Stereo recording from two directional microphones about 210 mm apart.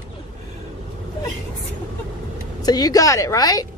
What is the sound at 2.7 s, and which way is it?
Speech, 20° left (ahead or behind).